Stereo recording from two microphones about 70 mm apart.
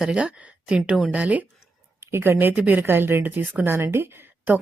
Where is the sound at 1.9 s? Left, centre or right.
Right.